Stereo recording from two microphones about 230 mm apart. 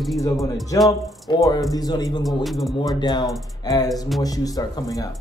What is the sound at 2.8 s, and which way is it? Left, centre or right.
Speech, centre.